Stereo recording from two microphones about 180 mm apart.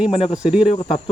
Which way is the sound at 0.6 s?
30° left (ahead or behind).